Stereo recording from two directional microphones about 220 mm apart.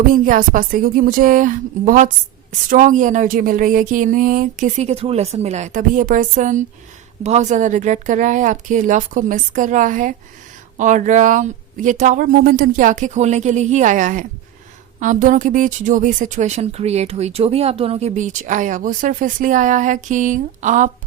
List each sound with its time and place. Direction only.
0.0 s speech: 40° right (ahead or behind)